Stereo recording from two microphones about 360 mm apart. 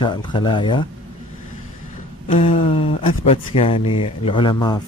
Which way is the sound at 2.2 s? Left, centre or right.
Centre.